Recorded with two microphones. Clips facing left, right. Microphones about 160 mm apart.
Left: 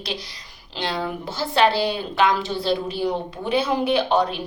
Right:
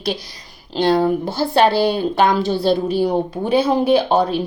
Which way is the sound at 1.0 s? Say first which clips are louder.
Right 9 dB; 40° right (ahead or behind).